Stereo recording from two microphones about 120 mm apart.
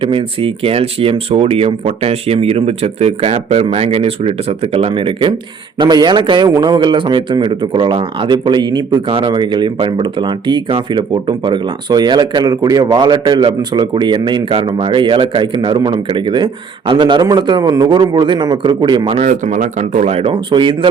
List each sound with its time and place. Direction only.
0.0 s a man's voice: 50° right (ahead or behind)
19.2 s speech: 85° right; by 20.7 s 40° right (ahead or behind)